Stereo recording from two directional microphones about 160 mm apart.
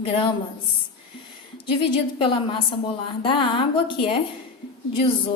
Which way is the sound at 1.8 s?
30° left (ahead or behind).